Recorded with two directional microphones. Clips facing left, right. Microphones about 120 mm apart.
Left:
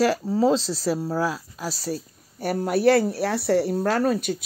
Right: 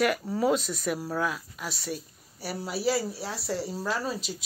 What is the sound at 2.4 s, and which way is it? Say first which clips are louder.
Speech: left 10 dB; 50° left (ahead or behind).